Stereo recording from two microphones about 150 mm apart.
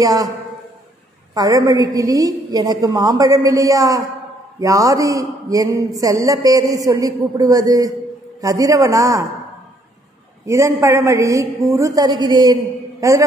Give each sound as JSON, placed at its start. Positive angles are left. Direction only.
{"t": 0.0, "sound": "a man's voice", "side_deg": -25}
{"t": 1.3, "sound": "a man's voice", "side_deg": -25}
{"t": 10.4, "sound": "a man's voice", "side_deg": -20}